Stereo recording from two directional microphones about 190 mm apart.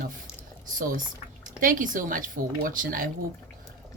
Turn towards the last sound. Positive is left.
turn(degrees=-45)  # may be behind; listen again after turning